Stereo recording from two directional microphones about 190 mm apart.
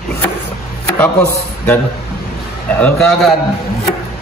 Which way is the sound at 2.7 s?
5° left (ahead or behind).